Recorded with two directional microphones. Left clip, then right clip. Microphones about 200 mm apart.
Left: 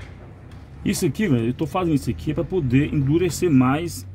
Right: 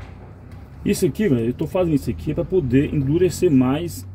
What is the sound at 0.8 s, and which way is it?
Speech, 45° left (ahead or behind).